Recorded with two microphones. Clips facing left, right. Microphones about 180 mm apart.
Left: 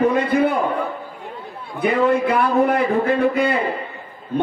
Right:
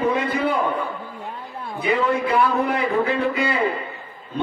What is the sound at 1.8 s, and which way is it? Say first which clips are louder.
A man's voice: left 4 dB; 55° left (ahead or behind).